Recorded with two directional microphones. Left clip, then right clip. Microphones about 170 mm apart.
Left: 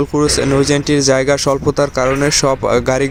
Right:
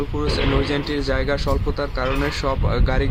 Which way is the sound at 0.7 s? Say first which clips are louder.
Left 10 dB; 40° left (ahead or behind).